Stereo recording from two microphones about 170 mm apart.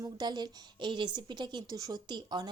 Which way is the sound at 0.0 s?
25° right (ahead or behind).